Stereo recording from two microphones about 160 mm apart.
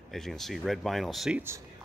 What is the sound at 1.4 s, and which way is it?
Speech, 15° right (ahead or behind).